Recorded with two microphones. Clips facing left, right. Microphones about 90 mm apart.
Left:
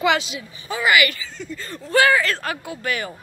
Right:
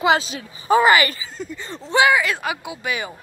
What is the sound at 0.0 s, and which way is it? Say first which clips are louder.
Speech: right 2 dB; 30° right (ahead or behind).